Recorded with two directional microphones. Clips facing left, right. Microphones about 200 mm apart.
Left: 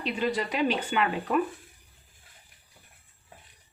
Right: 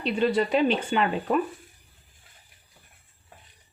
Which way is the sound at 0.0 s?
30° right (ahead or behind).